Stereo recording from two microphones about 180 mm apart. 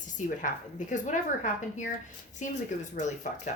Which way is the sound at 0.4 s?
45° left (ahead or behind).